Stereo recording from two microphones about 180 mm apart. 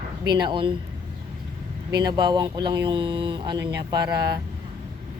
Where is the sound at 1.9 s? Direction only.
25° right (ahead or behind).